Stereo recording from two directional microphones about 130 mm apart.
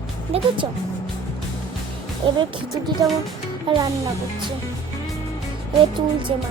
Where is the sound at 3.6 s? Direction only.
35° right (ahead or behind).